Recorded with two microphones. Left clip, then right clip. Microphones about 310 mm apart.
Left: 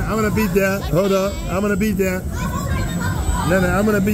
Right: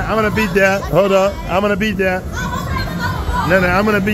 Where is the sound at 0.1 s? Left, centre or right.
Centre.